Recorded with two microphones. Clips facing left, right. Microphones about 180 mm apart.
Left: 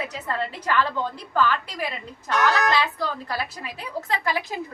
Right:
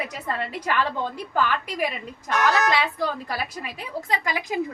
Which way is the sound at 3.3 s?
15° right (ahead or behind).